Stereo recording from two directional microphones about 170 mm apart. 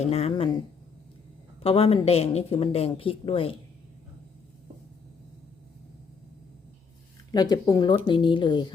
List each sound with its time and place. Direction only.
0.0 s speech: 40° left (ahead or behind)
1.6 s speech: 35° left (ahead or behind)
7.5 s speech: 25° left (ahead or behind)